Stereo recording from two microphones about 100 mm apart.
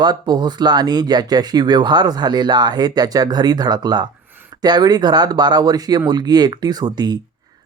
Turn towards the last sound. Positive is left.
turn(degrees=-45)  # may be behind; listen again after turning